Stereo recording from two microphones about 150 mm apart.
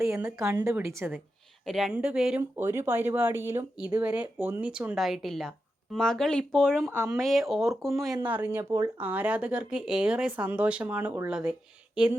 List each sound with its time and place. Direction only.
0.3 s speech: 5° right (ahead or behind)
0.5 s speech: 15° right (ahead or behind)
1.6 s speech: centre (ahead or behind)
2.4 s speech: 15° right (ahead or behind); by 8.1 s centre (ahead or behind)
8.3 s speech: 15° right (ahead or behind)